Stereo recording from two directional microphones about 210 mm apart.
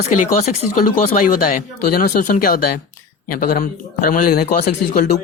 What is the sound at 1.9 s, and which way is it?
Speech, 45° left (ahead or behind).